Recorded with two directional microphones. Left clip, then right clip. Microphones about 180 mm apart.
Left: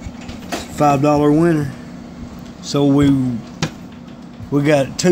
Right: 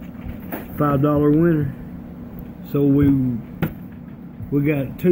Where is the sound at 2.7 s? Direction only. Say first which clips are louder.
Left 3 dB; 30° left (ahead or behind).